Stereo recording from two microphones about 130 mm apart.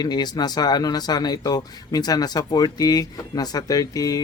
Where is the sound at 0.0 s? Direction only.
35° left (ahead or behind).